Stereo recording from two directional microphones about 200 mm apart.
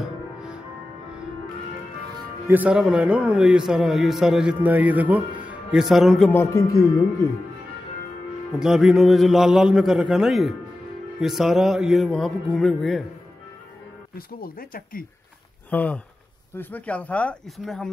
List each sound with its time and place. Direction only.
0.0 s music: 5° right (ahead or behind)
2.4 s a man's voice: 10° right (ahead or behind); by 7.1 s 15° left (ahead or behind)
8.5 s a man's voice: centre (ahead or behind)
14.1 s speech: 45° left (ahead or behind)
15.7 s speech: 10° left (ahead or behind)